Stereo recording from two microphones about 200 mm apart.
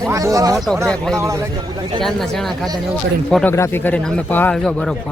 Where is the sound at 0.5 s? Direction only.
Centre (ahead or behind).